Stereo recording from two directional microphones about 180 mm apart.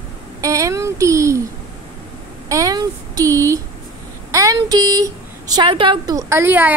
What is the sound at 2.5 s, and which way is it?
A woman's voice, 20° right (ahead or behind).